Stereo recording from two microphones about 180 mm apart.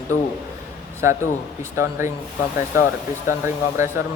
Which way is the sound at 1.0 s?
15° right (ahead or behind).